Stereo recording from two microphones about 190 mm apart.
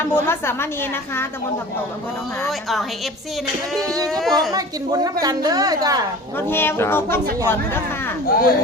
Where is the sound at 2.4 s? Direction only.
Centre (ahead or behind).